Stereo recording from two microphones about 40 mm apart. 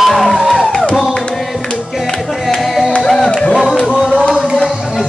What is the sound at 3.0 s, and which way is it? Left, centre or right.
Music, centre.